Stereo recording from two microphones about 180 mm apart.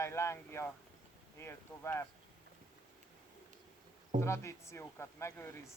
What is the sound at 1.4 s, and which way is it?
Speech, 15° left (ahead or behind).